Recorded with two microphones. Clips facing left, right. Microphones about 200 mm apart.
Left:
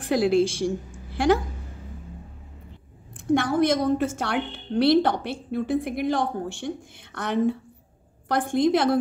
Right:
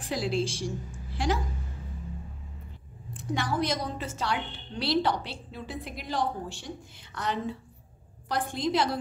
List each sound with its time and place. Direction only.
0.0 s a woman's voice: 55° left (ahead or behind)
3.3 s a woman's voice: 50° left (ahead or behind)